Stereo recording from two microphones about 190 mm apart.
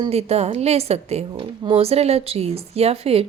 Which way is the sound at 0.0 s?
35° right (ahead or behind).